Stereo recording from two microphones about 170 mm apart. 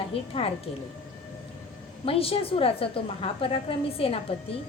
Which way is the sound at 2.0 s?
35° left (ahead or behind).